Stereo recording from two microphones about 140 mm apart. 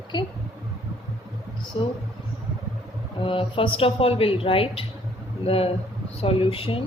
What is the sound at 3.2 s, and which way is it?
A woman's voice, 40° left (ahead or behind).